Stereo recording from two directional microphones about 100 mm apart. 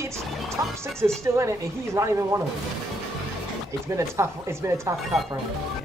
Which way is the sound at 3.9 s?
30° right (ahead or behind).